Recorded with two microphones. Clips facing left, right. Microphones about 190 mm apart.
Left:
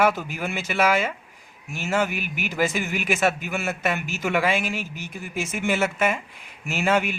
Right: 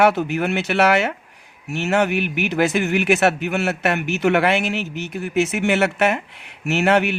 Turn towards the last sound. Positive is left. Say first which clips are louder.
# right 5 dB
turn(degrees=-70)  # may be behind; listen again after turning